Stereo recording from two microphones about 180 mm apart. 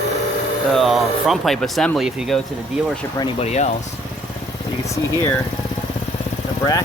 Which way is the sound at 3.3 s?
40° left (ahead or behind).